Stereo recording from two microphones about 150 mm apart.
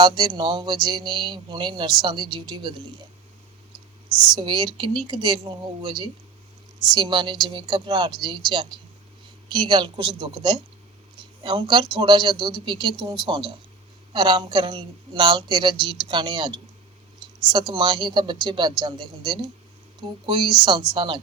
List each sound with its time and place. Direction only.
0.0 s speech: 30° right (ahead or behind)
4.3 s a woman's voice: 30° right (ahead or behind)
17.5 s a woman's voice: 30° right (ahead or behind)